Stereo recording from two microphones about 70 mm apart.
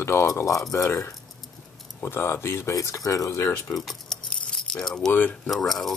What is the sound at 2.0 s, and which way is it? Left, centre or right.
Speech, left.